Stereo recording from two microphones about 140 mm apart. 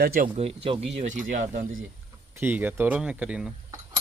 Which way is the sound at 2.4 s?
10° right (ahead or behind).